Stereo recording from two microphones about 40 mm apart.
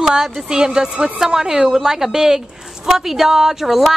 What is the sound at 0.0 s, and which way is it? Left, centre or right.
A woman's voice, centre.